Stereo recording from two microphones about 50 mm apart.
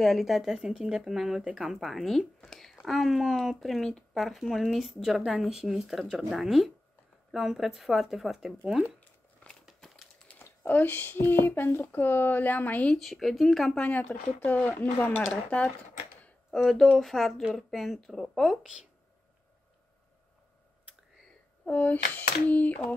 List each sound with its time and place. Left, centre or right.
0.0 s speech: centre
9.8 s crumpling: centre
10.3 s a sound: left
10.7 s speech: left
13.0 s speech: centre
14.1 s speech: left
16.5 s speech: centre
21.6 s speech: left